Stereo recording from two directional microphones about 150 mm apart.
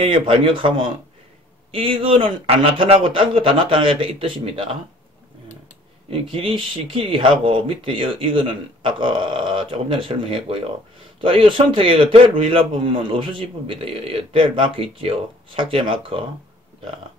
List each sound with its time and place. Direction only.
0.0 s a man's voice: 35° right (ahead or behind)
6.0 s a man's voice: 35° right (ahead or behind)